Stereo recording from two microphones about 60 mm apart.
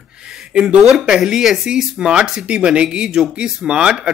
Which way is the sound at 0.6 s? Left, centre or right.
Centre.